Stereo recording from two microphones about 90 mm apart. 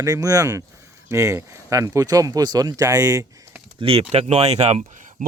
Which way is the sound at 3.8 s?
90° right.